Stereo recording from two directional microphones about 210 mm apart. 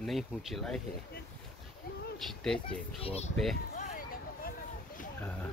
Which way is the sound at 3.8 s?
40° left (ahead or behind).